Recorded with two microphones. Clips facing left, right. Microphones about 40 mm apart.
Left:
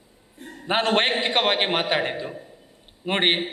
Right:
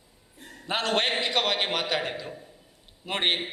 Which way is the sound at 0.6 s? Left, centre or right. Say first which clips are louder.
Left 5 dB; left.